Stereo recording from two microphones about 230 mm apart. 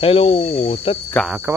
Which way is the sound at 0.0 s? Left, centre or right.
Left.